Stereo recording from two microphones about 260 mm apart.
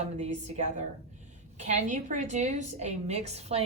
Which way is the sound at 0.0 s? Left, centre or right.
Right.